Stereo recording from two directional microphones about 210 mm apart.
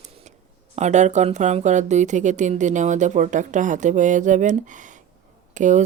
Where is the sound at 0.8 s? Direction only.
35° right (ahead or behind).